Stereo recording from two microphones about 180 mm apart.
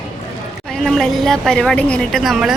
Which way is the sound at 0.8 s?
Centre (ahead or behind).